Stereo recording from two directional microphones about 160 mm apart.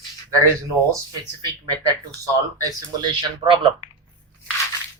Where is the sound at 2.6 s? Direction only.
25° right (ahead or behind).